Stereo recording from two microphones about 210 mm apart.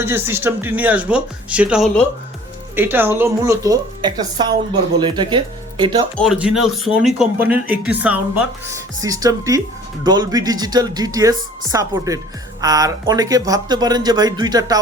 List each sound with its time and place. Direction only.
0.0 s a woman's voice: 10° right (ahead or behind)
6.1 s speech: centre (ahead or behind)
9.0 s a woman's voice: 15° right (ahead or behind)